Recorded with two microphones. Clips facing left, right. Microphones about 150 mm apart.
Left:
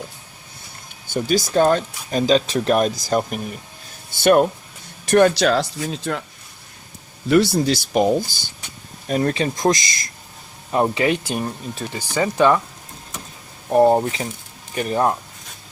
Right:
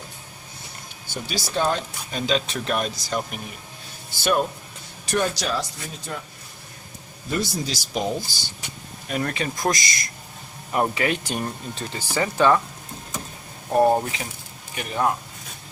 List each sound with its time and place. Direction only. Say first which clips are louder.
1.1 s speech: left 9 dB; 50° left (ahead or behind)
4.2 s speech: left 8 dB; 60° left (ahead or behind)
5.4 s speech: left 9 dB; 75° left (ahead or behind)
7.3 s speech: left 11 dB; 70° left (ahead or behind)
9.0 s speech: left 6 dB; 35° left (ahead or behind)
11.3 s speech: left 3 dB; 10° left (ahead or behind)
13.7 s speech: left 4 dB; 20° left (ahead or behind)
14.8 s speech: left 5 dB; 35° left (ahead or behind)